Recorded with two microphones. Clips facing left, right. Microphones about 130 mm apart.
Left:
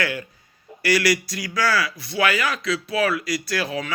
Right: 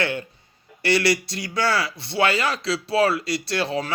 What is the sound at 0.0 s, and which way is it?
Speech, 25° right (ahead or behind).